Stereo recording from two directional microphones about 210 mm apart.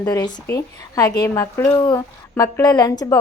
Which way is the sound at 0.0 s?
15° left (ahead or behind).